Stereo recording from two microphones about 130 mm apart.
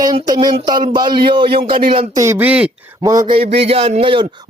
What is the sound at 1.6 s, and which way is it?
Speech, 90° right.